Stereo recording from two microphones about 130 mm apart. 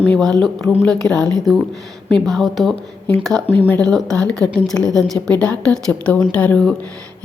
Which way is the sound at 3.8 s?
5° left (ahead or behind).